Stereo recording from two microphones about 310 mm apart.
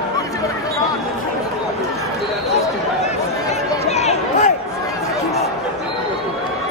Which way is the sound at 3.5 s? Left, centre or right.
Left.